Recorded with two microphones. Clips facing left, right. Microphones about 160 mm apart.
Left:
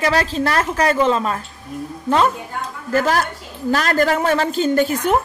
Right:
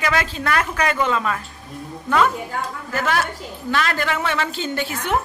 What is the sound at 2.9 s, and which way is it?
A woman's voice, 40° left (ahead or behind).